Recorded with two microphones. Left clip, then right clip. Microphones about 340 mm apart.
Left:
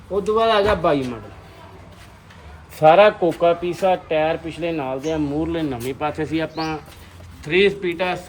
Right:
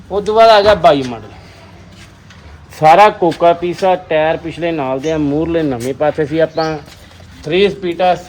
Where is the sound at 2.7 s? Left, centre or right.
Right; by 8.2 s centre.